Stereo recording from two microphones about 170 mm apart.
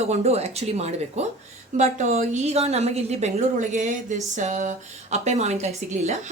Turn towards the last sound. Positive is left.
turn(degrees=-40)  # may be behind; listen again after turning